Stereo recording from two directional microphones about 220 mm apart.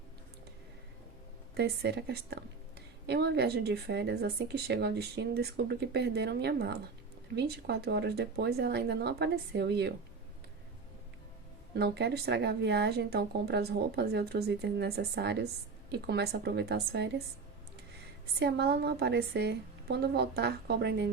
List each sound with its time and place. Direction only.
1.5 s a woman's voice: 50° right (ahead or behind)
11.7 s a woman's voice: 50° right (ahead or behind)
18.3 s a woman's voice: 50° right (ahead or behind)